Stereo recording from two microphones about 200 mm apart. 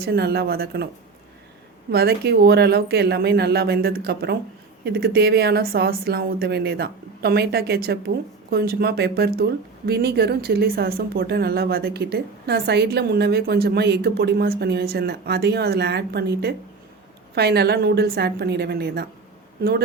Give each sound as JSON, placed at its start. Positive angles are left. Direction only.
{"t": 0.0, "sound": "a woman's voice", "side_deg": -50}
{"t": 1.9, "sound": "a woman's voice", "side_deg": -50}